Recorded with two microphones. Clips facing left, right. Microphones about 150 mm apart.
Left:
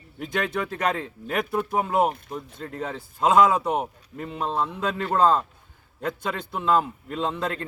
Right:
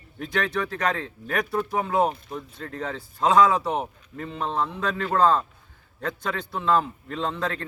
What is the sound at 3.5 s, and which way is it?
A man's voice, 10° left (ahead or behind).